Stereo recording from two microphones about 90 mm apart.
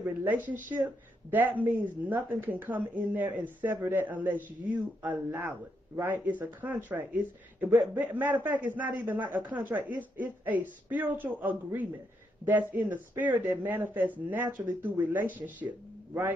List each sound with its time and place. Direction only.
0.0 s speech: 20° right (ahead or behind)